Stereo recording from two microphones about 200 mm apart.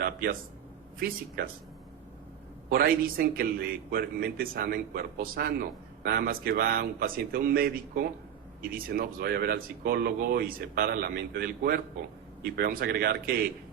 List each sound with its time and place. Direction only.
0.0 s a sound: 50° right (ahead or behind)
0.9 s a man's voice: 50° right (ahead or behind)
2.6 s a man's voice: 45° right (ahead or behind)